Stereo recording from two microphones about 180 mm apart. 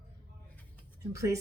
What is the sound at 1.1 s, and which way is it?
Speech, 15° right (ahead or behind).